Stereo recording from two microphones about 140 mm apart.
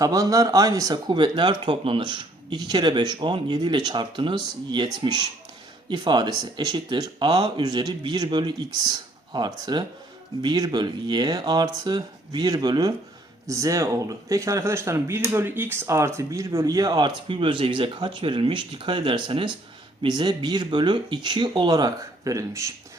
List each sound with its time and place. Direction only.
0.0 s speech: 25° right (ahead or behind)
5.9 s speech: 30° right (ahead or behind)
17.2 s speech: 40° right (ahead or behind); by 22.7 s 25° right (ahead or behind)